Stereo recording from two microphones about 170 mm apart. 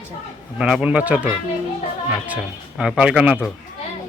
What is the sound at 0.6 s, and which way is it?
Speech, 5° right (ahead or behind).